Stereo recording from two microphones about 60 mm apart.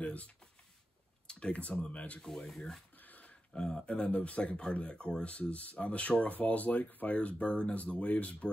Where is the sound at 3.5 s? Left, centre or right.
Centre.